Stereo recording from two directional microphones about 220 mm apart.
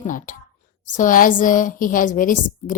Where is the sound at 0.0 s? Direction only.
35° left (ahead or behind).